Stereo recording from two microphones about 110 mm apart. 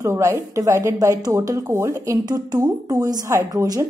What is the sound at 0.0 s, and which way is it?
A woman's voice, 25° right (ahead or behind).